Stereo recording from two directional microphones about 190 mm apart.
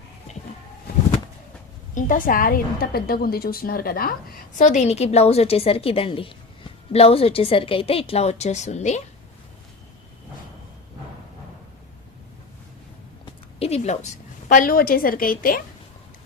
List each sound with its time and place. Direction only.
2.0 s a woman's voice: 45° left (ahead or behind)
13.2 s a woman's voice: 30° left (ahead or behind); by 15.6 s 50° left (ahead or behind)